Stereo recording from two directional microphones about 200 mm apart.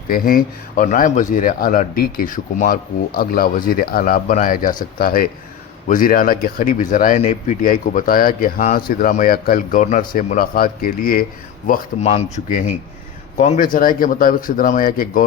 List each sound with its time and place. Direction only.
0.1 s speech: 45° left (ahead or behind)